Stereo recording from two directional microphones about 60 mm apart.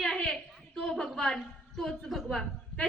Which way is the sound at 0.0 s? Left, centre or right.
Centre.